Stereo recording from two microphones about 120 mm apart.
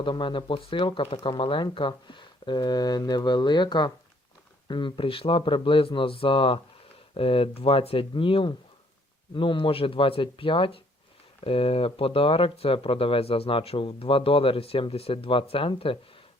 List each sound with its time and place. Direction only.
0.0 s speech: 45° left (ahead or behind)